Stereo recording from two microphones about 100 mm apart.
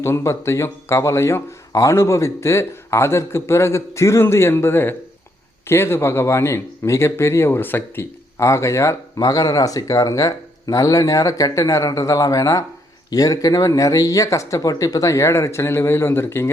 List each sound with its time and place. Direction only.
0.0 s speech: 30° left (ahead or behind)